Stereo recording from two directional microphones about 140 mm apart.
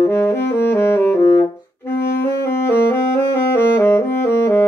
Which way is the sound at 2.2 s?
15° left (ahead or behind).